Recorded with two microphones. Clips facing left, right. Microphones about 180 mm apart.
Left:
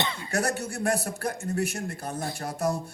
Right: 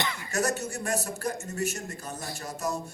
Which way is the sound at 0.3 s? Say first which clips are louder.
Right 1 dB; 55° left (ahead or behind).